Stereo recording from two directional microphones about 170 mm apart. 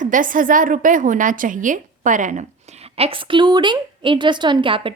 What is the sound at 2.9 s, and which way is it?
A woman's voice, 35° right (ahead or behind).